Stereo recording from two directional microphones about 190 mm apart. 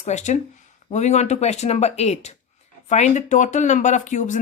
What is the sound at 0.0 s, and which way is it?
Speech, 40° left (ahead or behind).